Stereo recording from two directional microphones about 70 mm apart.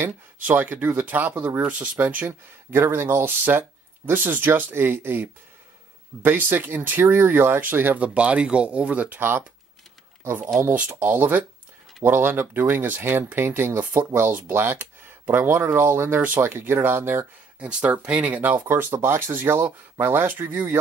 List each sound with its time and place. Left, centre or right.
0.0 s speech: right
2.7 s speech: right
8.0 s speech: centre
17.6 s speech: centre